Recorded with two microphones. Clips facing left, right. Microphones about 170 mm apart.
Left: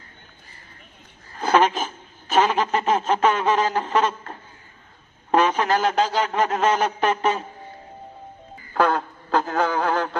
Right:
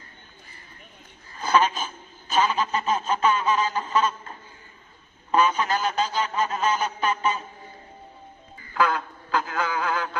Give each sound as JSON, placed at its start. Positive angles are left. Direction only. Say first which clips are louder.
{"t": 1.4, "sound": "a sound", "louder": "left 3 dB", "side_deg": 80}
{"t": 5.3, "sound": "a man's voice", "louder": "left 3 dB", "side_deg": 70}
{"t": 8.7, "sound": "a man's voice", "louder": "left 4 dB", "side_deg": 45}